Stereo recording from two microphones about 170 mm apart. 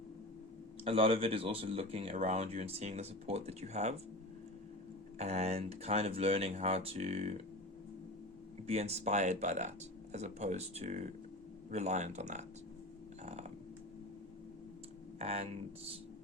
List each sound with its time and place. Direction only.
0.9 s speech: 35° right (ahead or behind)
5.1 s speech: 40° right (ahead or behind)
8.6 s speech: 40° right (ahead or behind)
15.2 s speech: 40° right (ahead or behind)